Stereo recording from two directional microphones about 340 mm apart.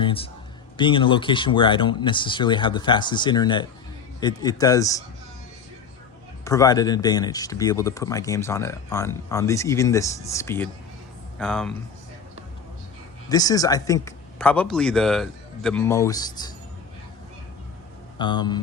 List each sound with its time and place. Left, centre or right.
0.0 s a sound: centre
0.8 s speech: centre
6.4 s speech: centre
13.2 s speech: centre
18.2 s speech: centre